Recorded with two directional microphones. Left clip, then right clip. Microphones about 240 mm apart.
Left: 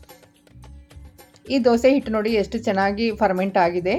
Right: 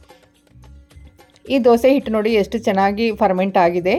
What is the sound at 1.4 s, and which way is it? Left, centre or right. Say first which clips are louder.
A woman's voice: right 4 dB; centre.